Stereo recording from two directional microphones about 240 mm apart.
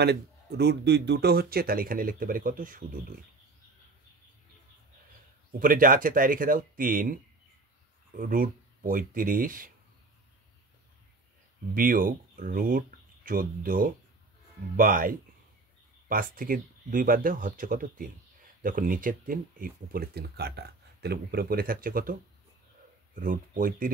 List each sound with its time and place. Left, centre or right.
0.0 s speech: right
5.6 s speech: right
8.2 s speech: right
11.7 s speech: right
23.1 s speech: right